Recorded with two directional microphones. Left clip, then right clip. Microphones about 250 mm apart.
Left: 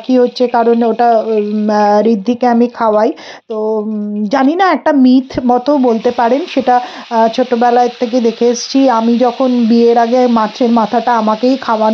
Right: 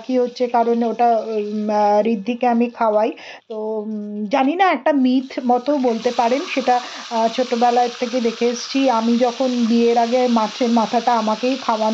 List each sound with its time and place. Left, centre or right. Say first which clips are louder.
0.1 s speech: left 7 dB; left
4.3 s speech: left 5 dB; left